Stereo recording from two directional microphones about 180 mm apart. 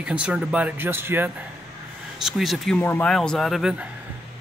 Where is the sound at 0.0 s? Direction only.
5° right (ahead or behind).